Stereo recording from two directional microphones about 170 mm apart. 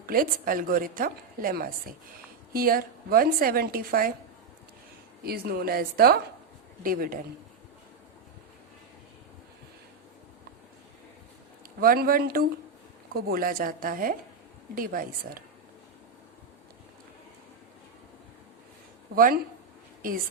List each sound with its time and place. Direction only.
0.0 s a woman's voice: 60° right (ahead or behind)
5.2 s a woman's voice: 65° right (ahead or behind)
11.8 s a woman's voice: 60° right (ahead or behind)
19.1 s a woman's voice: 60° right (ahead or behind)